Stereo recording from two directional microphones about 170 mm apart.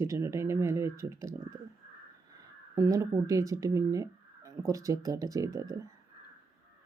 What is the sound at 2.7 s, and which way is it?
Speech, 20° right (ahead or behind).